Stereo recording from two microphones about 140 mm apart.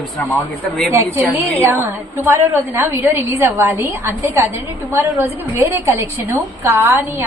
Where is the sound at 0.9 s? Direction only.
15° right (ahead or behind).